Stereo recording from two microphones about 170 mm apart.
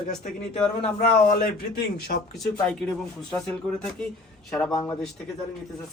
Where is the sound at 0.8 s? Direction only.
50° left (ahead or behind).